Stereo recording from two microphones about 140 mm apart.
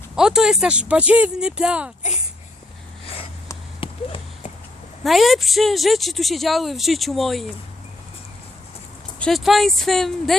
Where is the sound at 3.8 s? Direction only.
40° left (ahead or behind).